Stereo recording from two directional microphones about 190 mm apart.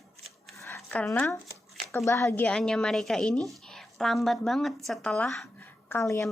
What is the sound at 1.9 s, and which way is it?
A woman's voice, 15° left (ahead or behind).